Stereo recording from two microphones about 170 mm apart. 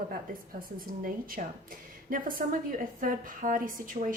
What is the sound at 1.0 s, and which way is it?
A woman's voice, 55° right (ahead or behind).